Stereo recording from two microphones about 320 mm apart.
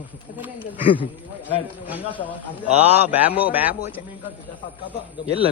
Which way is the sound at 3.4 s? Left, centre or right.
Centre.